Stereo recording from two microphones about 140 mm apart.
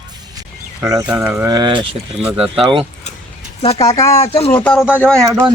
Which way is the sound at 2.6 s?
40° right (ahead or behind).